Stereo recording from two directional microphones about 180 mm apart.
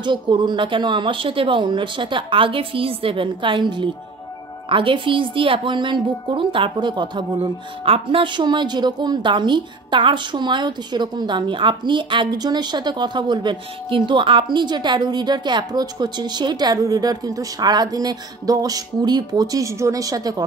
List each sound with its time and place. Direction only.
0.0 s a woman's voice: 25° right (ahead or behind)